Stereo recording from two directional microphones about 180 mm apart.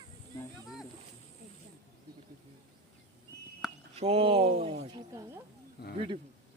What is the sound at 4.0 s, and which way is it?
Speech, 35° right (ahead or behind).